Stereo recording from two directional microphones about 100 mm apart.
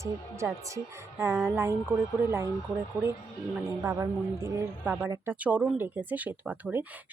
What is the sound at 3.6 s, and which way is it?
Speech, 30° right (ahead or behind).